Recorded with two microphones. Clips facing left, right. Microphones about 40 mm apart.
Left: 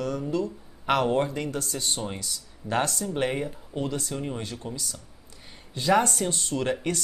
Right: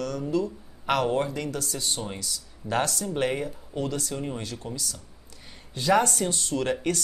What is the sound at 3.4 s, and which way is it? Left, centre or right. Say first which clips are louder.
Speech: even; left.